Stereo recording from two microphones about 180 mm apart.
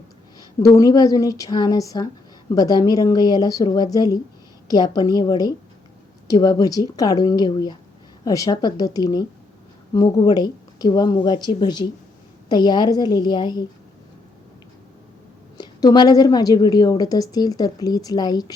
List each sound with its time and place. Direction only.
0.3 s a woman's voice: 20° left (ahead or behind)
15.5 s a woman's voice: 20° left (ahead or behind)